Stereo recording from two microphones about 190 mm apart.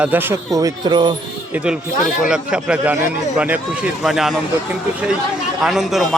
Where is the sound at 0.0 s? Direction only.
10° right (ahead or behind).